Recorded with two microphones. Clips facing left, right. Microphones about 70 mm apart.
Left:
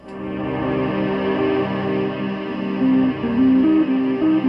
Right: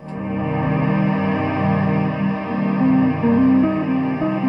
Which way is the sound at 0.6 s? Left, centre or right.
Right.